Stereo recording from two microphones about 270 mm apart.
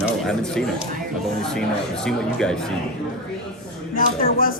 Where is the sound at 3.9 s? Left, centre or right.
Left.